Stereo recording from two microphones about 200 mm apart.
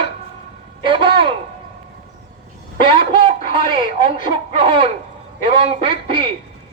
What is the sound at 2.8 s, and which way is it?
Speech, 25° right (ahead or behind).